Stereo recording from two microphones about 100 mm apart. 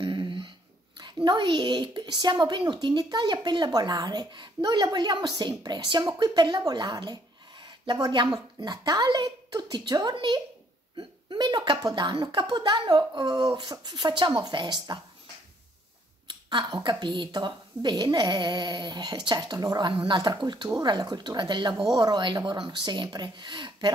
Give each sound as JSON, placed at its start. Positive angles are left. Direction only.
{"t": 0.0, "sound": "a sound", "side_deg": -50}
{"t": 0.9, "sound": "speech", "side_deg": -45}
{"t": 16.3, "sound": "speech", "side_deg": -50}